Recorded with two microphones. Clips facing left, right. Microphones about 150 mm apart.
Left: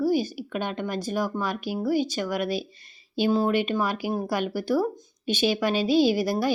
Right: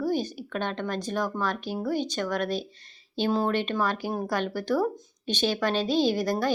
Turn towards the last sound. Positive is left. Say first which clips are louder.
# left 3 dB
turn(degrees=10)  # may be behind; listen again after turning